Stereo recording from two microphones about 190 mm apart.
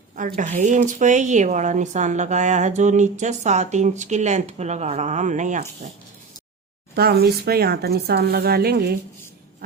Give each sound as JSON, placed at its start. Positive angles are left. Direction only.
{"t": 0.2, "sound": "speech", "side_deg": -45}
{"t": 6.9, "sound": "speech", "side_deg": -55}